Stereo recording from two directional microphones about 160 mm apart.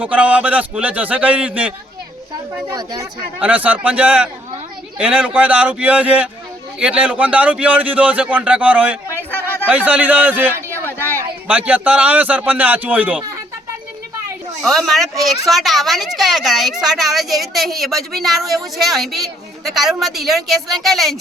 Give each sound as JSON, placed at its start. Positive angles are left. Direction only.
{"t": 0.0, "sound": "a man's voice", "side_deg": -10}
{"t": 2.7, "sound": "speech", "side_deg": -25}
{"t": 3.4, "sound": "a man's voice", "side_deg": -10}
{"t": 9.0, "sound": "a sound", "side_deg": 15}
{"t": 9.6, "sound": "a man's voice", "side_deg": -10}
{"t": 10.7, "sound": "a sound", "side_deg": 15}
{"t": 11.2, "sound": "a man's voice", "side_deg": -10}
{"t": 14.6, "sound": "a woman's voice", "side_deg": 0}